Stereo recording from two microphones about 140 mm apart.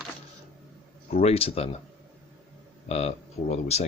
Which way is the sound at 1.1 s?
45° left (ahead or behind).